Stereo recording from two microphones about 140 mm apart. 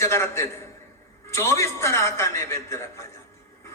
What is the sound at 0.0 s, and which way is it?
A man's voice, 20° left (ahead or behind).